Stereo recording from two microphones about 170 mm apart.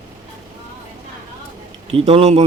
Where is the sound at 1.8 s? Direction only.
35° right (ahead or behind).